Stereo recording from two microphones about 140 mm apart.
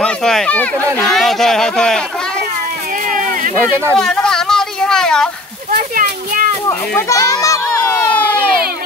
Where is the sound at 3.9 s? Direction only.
5° left (ahead or behind).